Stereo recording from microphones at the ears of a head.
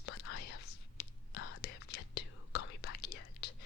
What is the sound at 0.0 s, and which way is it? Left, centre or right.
Whispering, left.